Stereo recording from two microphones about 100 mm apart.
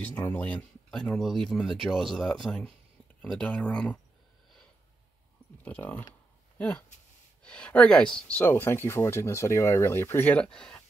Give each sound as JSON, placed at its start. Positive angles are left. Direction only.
{"t": 0.0, "sound": "speech", "side_deg": 20}
{"t": 5.6, "sound": "speech", "side_deg": 15}
{"t": 7.4, "sound": "speech", "side_deg": 10}
{"t": 10.4, "sound": "speech", "side_deg": 10}